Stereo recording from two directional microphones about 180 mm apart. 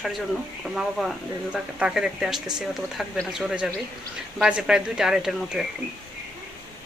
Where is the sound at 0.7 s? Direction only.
Centre (ahead or behind).